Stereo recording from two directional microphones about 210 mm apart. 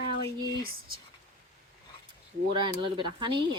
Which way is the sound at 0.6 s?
45° right (ahead or behind).